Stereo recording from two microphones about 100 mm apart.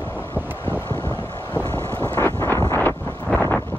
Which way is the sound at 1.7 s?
20° left (ahead or behind).